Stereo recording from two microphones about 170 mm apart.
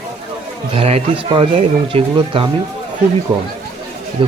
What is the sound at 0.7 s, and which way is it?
Speech, 35° right (ahead or behind).